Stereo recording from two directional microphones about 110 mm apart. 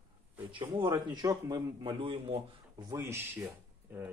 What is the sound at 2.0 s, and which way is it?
Speech, 50° right (ahead or behind).